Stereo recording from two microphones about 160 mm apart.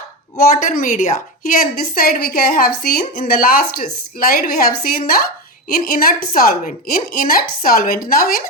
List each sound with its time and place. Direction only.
0.3 s a woman's voice: 55° left (ahead or behind)